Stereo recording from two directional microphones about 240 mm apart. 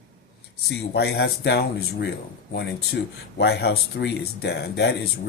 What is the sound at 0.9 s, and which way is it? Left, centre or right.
Speech, left.